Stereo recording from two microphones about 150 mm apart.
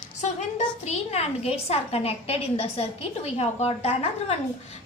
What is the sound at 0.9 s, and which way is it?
A woman's voice, 45° left (ahead or behind).